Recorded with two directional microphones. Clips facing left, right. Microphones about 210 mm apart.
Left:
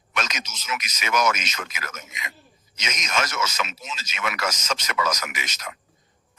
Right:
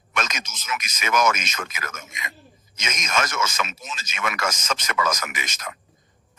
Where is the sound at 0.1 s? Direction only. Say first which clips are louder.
Right 1 dB; 50° right (ahead or behind).